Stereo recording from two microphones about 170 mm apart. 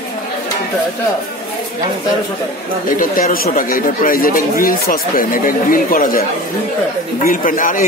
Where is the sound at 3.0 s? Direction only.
55° left (ahead or behind).